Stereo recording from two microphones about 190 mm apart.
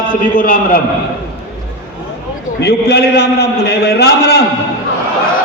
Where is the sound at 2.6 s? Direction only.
60° left (ahead or behind).